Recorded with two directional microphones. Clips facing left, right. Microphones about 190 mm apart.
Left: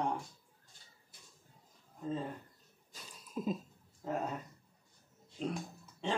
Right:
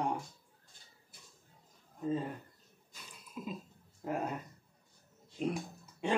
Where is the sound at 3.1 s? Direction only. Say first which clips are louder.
Left 6 dB; 40° left (ahead or behind).